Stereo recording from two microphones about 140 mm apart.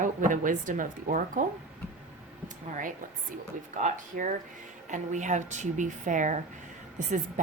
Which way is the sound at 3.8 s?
60° right (ahead or behind).